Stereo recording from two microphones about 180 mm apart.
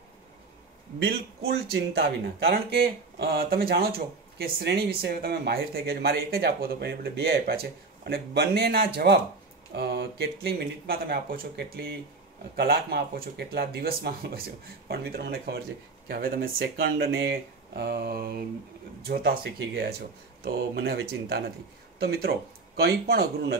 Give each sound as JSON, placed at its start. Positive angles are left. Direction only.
{"t": 0.9, "sound": "a man's voice", "side_deg": -90}
{"t": 2.0, "sound": "speech", "side_deg": -65}